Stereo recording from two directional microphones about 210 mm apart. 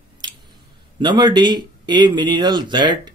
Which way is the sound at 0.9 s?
20° right (ahead or behind).